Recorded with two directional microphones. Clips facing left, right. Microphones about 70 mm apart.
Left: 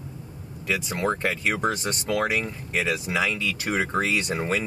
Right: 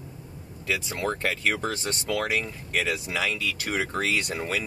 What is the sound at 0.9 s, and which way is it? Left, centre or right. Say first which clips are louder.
Speech: left 4 dB; left.